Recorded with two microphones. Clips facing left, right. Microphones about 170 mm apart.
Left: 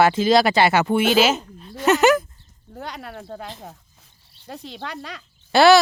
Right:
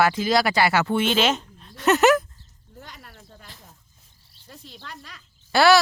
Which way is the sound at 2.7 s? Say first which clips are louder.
Left 11 dB; 80° left.